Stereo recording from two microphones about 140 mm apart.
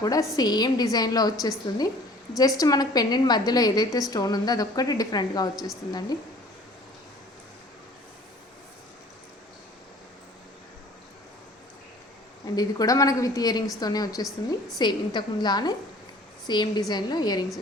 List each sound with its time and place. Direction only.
0.0 s a woman's voice: 25° left (ahead or behind)
12.5 s a woman's voice: 25° left (ahead or behind)